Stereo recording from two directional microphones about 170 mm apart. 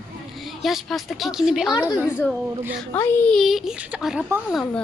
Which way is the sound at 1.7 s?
20° left (ahead or behind).